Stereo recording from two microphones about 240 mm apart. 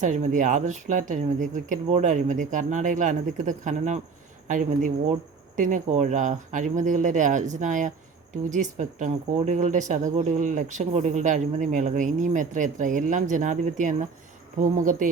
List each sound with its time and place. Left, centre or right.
0.0 s speech: right